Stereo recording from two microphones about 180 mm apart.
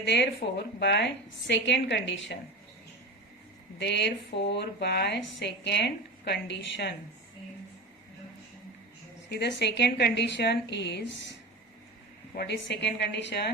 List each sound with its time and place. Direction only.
0.0 s a woman's voice: 75° left (ahead or behind); by 2.4 s 90° left
3.8 s a woman's voice: 75° left (ahead or behind)
9.4 s a woman's voice: 70° left (ahead or behind)
12.3 s a woman's voice: 65° left (ahead or behind)